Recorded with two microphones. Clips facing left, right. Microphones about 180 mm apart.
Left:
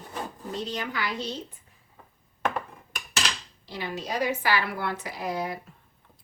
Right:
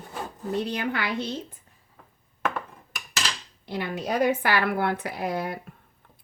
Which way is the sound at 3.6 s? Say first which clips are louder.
Right 4 dB; 55° right (ahead or behind).